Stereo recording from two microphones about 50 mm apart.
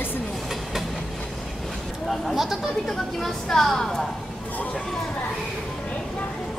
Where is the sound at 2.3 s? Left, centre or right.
Centre.